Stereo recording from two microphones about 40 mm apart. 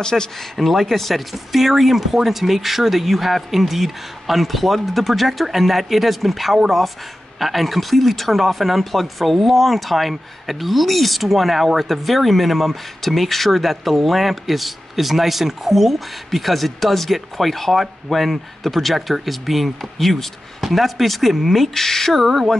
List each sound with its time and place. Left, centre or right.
0.0 s speech: centre
0.6 s speech: centre